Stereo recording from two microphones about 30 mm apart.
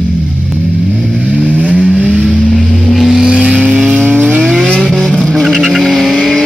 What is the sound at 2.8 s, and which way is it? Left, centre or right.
Vehicle, centre.